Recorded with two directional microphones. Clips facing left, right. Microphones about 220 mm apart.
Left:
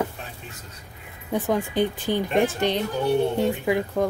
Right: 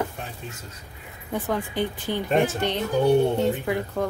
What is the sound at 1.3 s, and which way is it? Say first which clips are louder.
Speech: left 3 dB; 15° left (ahead or behind).